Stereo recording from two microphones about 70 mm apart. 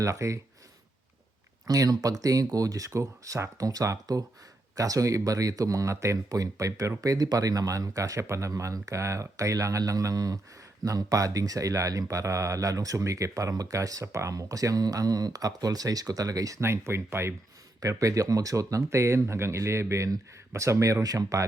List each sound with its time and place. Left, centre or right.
0.0 s speech: right
1.6 s speech: right
16.6 s speech: right
17.7 s speech: right